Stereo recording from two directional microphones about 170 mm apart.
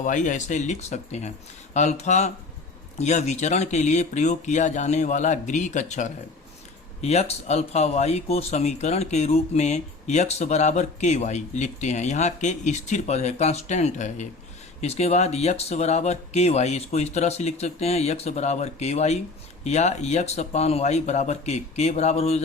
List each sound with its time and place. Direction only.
0.0 s speech: 50° left (ahead or behind)